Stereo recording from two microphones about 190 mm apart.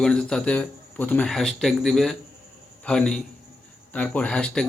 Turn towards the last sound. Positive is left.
turn(degrees=5)  # may be behind; listen again after turning